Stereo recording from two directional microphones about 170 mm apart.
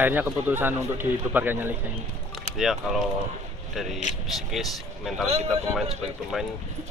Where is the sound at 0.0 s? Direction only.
10° right (ahead or behind).